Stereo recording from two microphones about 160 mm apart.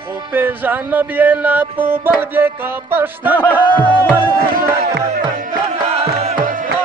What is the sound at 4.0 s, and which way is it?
Music, 10° left (ahead or behind).